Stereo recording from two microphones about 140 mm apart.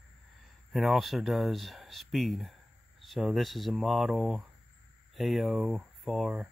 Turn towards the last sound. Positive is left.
turn(degrees=0)  # may be behind; listen again after turning